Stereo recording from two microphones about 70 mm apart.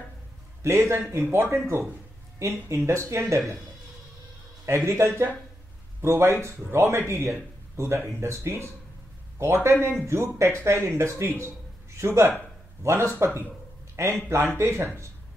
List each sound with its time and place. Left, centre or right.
0.6 s a man's voice: right
4.6 s a man's voice: right